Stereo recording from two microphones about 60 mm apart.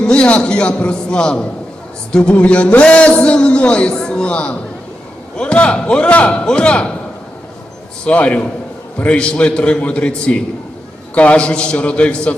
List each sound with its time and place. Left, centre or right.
0.0 s a man's voice: centre
8.0 s a man's voice: left